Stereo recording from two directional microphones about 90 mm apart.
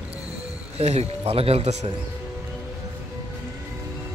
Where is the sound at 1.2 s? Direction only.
90° right.